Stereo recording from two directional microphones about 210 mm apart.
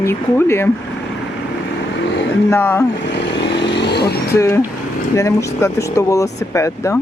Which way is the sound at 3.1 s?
55° left (ahead or behind).